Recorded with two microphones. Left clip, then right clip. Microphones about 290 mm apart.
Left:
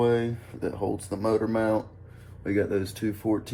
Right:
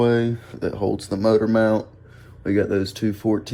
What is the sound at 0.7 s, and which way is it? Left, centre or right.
Speech, right.